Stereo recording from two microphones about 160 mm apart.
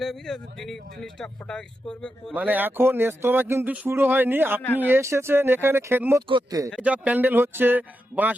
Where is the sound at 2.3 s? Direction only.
10° right (ahead or behind).